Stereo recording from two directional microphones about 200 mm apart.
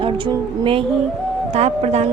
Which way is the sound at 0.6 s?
25° right (ahead or behind).